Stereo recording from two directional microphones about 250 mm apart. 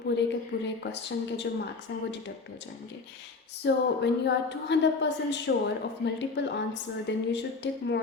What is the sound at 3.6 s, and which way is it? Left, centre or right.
A woman's voice, left.